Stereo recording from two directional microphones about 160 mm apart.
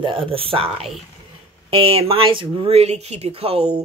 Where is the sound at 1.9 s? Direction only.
35° right (ahead or behind).